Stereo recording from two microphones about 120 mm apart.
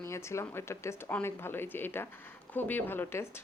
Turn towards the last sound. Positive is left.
turn(degrees=15)  # may be behind; listen again after turning